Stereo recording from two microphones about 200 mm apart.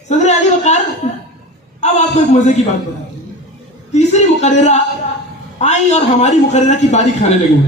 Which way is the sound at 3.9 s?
35° left (ahead or behind).